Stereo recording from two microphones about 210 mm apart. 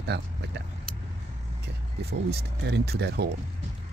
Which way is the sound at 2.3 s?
50° right (ahead or behind).